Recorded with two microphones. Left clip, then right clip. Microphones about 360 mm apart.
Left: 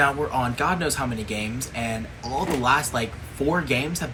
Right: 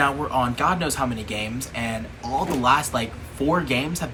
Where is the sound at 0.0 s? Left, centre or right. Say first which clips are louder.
Even; centre.